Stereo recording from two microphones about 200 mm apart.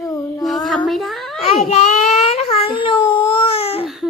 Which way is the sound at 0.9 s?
Centre (ahead or behind).